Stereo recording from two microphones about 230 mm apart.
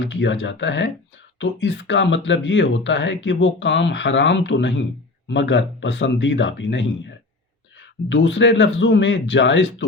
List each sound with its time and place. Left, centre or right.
0.0 s speech: left
8.1 s speech: left